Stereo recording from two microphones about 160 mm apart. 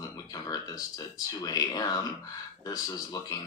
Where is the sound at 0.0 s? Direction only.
25° left (ahead or behind).